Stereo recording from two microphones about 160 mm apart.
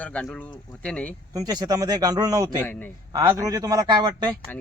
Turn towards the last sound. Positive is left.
turn(degrees=-25)  # may be behind; listen again after turning